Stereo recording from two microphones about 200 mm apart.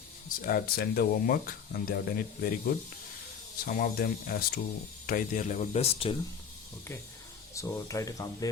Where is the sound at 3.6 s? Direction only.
45° left (ahead or behind); by 6.1 s 30° left (ahead or behind).